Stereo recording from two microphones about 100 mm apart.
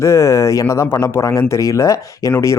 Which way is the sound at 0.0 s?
30° left (ahead or behind).